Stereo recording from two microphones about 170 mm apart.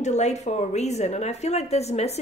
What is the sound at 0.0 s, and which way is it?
Speech, 40° left (ahead or behind).